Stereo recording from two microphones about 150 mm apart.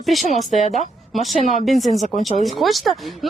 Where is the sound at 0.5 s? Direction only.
50° left (ahead or behind).